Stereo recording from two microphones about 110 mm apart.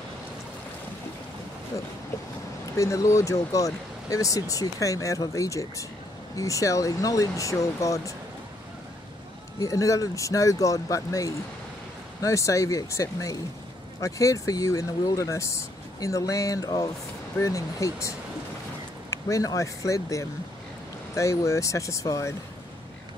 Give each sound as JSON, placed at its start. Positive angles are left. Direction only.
{"t": 2.8, "sound": "speech", "side_deg": 30}
{"t": 9.6, "sound": "speech", "side_deg": 30}
{"t": 19.0, "sound": "speech", "side_deg": 30}